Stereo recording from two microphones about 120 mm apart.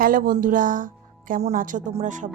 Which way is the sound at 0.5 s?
90° right.